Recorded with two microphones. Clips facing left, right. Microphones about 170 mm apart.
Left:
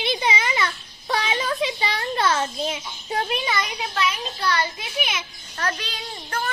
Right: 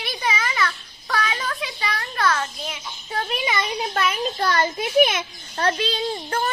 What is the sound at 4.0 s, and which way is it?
A child's voice, 50° right (ahead or behind).